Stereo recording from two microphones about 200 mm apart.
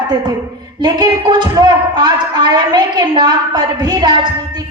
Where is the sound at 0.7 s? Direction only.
20° right (ahead or behind).